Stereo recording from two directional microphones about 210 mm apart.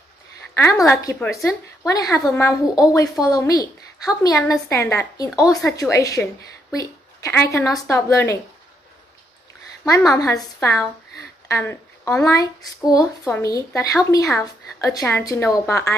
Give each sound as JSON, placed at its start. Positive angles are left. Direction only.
{"t": 0.6, "sound": "a woman's voice", "side_deg": 15}
{"t": 10.1, "sound": "a woman's voice", "side_deg": 15}
{"t": 11.4, "sound": "a sound", "side_deg": 15}
{"t": 12.2, "sound": "a woman's voice", "side_deg": 15}